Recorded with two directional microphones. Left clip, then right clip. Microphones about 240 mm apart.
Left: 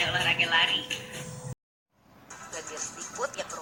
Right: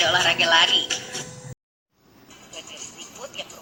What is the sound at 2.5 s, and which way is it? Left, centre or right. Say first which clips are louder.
Music: even; left.